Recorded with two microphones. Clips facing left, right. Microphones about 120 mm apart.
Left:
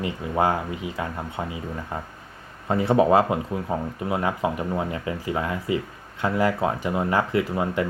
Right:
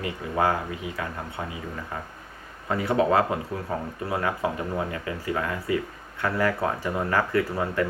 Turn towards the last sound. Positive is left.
turn(degrees=20)  # may be behind; listen again after turning